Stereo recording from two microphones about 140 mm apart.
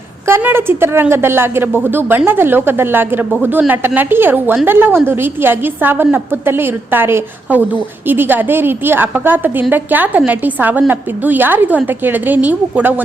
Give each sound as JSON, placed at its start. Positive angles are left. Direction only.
{"t": 0.3, "sound": "a woman's voice", "side_deg": -15}